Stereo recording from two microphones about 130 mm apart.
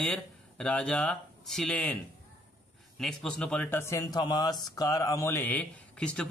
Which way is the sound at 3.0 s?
5° left (ahead or behind).